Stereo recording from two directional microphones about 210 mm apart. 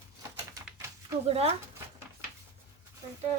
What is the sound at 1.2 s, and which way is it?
Speech, 30° right (ahead or behind).